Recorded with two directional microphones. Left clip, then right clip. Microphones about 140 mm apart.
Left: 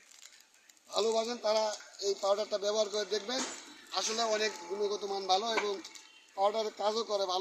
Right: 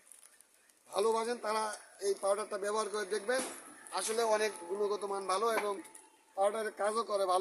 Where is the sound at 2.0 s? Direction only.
35° right (ahead or behind).